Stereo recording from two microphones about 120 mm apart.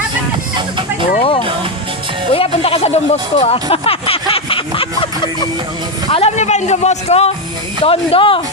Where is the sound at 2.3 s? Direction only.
55° left (ahead or behind).